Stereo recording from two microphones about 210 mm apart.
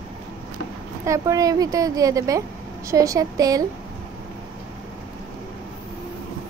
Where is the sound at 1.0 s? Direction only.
15° right (ahead or behind).